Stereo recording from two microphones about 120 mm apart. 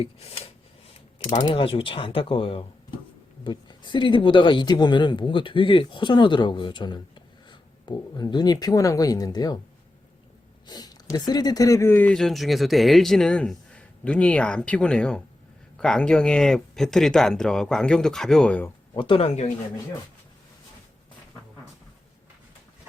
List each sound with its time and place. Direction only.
0.0 s a sound: 55° left (ahead or behind)
1.2 s mechanisms: 90° left
1.5 s speech: 45° left (ahead or behind)
3.4 s speech: 40° left (ahead or behind)
10.7 s speech: 35° left (ahead or behind); by 12.1 s 15° left (ahead or behind)
12.1 s speech: centre (ahead or behind)
18.9 s speech: 50° left (ahead or behind)